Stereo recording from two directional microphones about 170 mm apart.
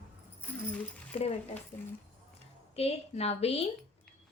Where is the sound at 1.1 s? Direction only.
40° left (ahead or behind).